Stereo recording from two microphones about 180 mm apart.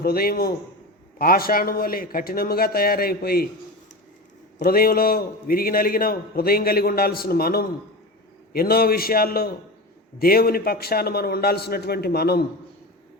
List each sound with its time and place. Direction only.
0.0 s a man's voice: 55° left (ahead or behind)
4.5 s a man's voice: 55° left (ahead or behind)